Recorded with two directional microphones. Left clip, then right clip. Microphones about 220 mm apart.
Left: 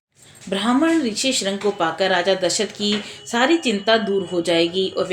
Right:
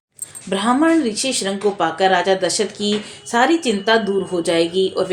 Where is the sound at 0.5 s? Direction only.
25° right (ahead or behind).